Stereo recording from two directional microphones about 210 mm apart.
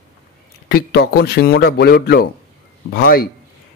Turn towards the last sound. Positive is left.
turn(degrees=45)  # may be behind; listen again after turning